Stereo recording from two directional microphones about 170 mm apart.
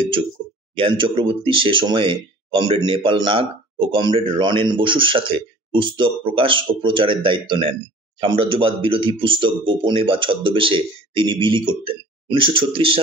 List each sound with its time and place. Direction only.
0.0 s speech: 30° right (ahead or behind)